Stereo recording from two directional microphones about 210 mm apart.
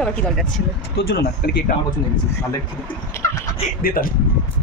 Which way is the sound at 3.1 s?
15° left (ahead or behind).